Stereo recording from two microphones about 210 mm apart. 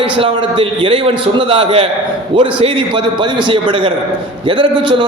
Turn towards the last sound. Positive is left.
turn(degrees=-25)  # may be behind; listen again after turning